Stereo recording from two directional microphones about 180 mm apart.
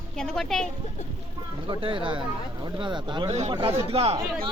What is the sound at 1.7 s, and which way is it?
Speech, 30° right (ahead or behind).